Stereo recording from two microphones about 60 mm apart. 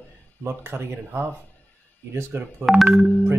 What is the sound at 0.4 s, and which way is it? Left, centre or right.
Speech, right.